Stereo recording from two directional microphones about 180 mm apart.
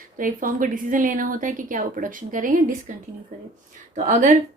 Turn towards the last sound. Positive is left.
turn(degrees=-45)  # may be behind; listen again after turning